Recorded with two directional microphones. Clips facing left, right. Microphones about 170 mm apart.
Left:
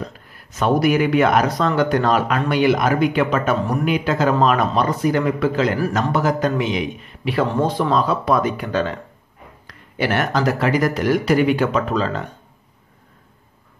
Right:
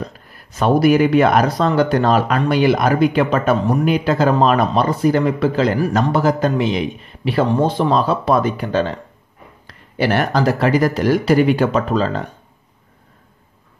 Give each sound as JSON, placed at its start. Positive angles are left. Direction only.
{"t": 0.6, "sound": "speech", "side_deg": -35}